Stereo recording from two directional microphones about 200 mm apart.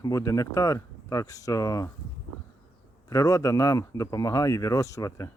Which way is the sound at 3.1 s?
15° left (ahead or behind).